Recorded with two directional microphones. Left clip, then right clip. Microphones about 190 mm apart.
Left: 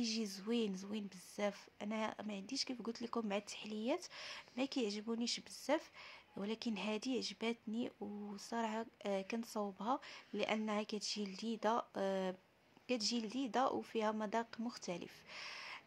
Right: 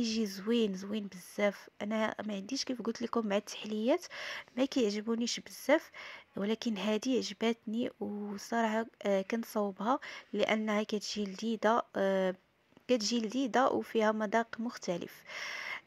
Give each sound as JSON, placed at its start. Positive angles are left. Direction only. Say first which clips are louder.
{"t": 0.0, "sound": "speech", "louder": "right 7 dB", "side_deg": -25}